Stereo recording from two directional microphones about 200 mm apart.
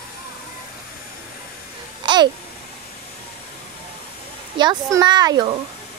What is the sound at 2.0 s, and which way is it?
Babbling, 20° right (ahead or behind).